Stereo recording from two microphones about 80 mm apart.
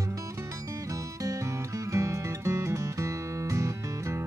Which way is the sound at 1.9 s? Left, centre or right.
Right.